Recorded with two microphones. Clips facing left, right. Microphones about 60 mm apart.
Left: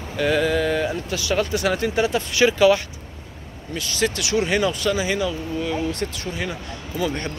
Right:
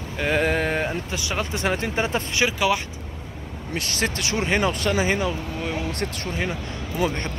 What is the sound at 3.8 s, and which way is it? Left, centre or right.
Speech, right.